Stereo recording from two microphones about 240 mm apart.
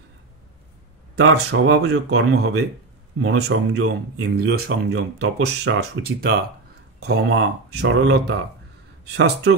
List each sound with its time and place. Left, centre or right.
1.3 s speech: right
4.6 s speech: right